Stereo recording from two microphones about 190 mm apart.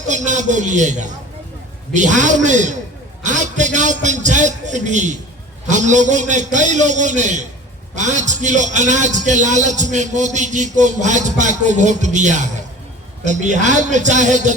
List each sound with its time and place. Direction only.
0.3 s a man's voice: 40° right (ahead or behind)